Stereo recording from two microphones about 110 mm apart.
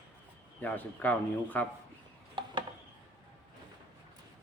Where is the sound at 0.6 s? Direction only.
15° left (ahead or behind).